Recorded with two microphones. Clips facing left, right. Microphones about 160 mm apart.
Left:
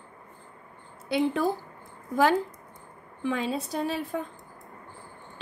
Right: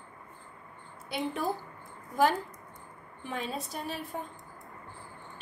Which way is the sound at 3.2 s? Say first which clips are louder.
Left 7 dB; 90° left.